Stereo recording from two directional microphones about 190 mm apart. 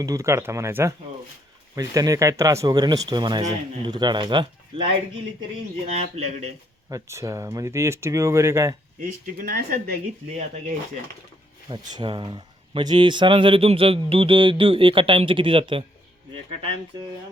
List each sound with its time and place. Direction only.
0.0 s speech: 15° right (ahead or behind)
5.8 s a man's voice: 35° right (ahead or behind)
6.9 s speech: 15° right (ahead or behind)
9.0 s speech: 50° right (ahead or behind)
11.7 s speech: 25° right (ahead or behind)